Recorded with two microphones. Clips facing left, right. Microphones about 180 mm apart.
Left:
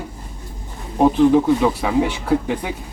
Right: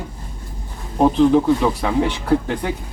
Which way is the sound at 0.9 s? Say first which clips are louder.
Even; 5° left (ahead or behind).